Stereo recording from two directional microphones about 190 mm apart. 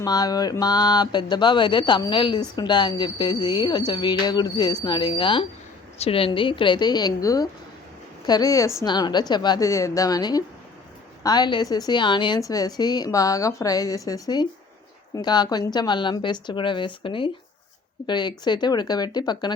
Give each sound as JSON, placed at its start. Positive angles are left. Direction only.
{"t": 0.0, "sound": "speech", "side_deg": 20}